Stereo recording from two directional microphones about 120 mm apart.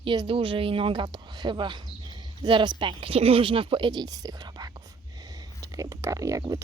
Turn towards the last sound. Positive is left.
turn(degrees=-25)  # may be behind; listen again after turning